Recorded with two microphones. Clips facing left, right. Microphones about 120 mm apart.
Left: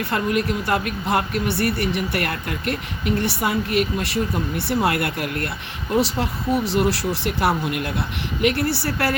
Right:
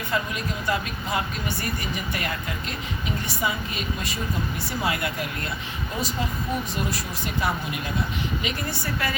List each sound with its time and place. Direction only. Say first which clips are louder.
0.1 s speech: left 6 dB; 65° left (ahead or behind)